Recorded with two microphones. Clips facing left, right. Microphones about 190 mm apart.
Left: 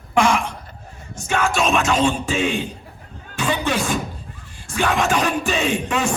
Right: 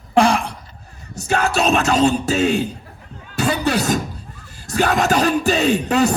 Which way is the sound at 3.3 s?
40° right (ahead or behind).